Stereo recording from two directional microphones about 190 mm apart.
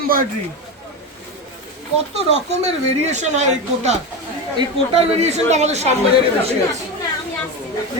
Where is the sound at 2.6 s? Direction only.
35° right (ahead or behind).